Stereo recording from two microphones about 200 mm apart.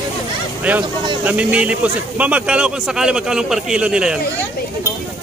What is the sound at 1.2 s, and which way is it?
Speech, 5° right (ahead or behind).